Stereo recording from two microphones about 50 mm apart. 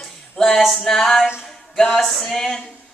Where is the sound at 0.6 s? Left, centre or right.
Centre.